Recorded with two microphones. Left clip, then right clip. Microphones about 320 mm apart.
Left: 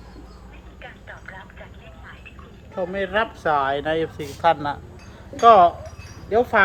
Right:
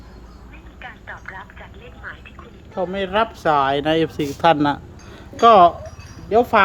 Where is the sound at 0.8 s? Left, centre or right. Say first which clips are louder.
Right 5 dB; centre.